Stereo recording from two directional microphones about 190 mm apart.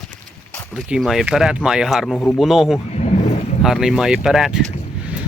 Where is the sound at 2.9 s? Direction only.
35° left (ahead or behind).